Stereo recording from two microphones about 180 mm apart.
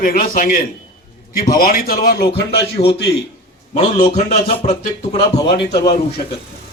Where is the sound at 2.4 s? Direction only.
70° left (ahead or behind).